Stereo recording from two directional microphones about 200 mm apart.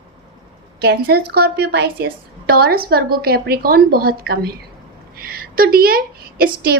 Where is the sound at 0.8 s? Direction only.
55° right (ahead or behind).